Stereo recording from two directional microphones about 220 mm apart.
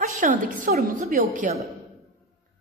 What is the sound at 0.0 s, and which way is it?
A woman's voice, 35° right (ahead or behind).